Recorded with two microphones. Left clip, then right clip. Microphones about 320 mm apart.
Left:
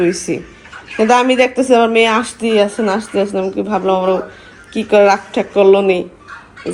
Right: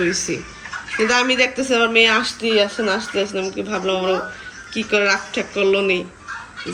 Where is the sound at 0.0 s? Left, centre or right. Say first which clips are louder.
Left 5 dB; centre.